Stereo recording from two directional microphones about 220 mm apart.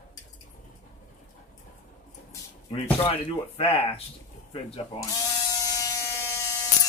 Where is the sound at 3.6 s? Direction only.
25° left (ahead or behind).